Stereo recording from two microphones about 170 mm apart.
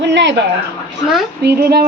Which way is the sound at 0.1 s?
90° right.